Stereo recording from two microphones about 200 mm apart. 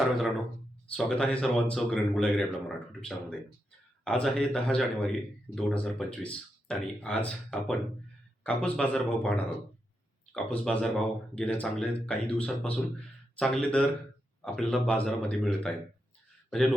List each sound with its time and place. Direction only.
0.9 s a man's voice: 5° left (ahead or behind)